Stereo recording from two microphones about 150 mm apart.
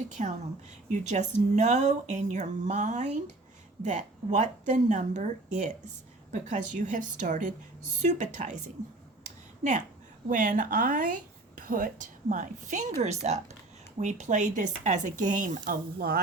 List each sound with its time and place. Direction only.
0.2 s speech: 55° right (ahead or behind)
9.2 s a sound: 55° right (ahead or behind)
10.2 s speech: 60° right (ahead or behind); by 16.2 s 85° right